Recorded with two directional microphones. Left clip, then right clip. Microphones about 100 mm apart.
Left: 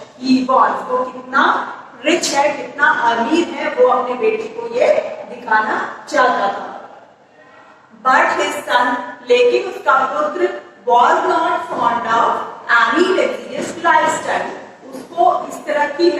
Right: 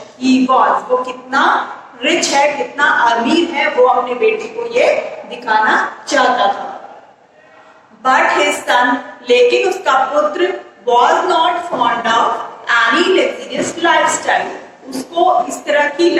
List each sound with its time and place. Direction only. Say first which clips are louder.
0.2 s a woman's voice: right 2 dB; 30° right (ahead or behind)
8.0 s a woman's voice: right 2 dB; 30° right (ahead or behind)